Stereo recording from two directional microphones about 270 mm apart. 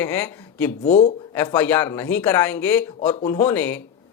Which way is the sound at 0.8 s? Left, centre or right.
Left.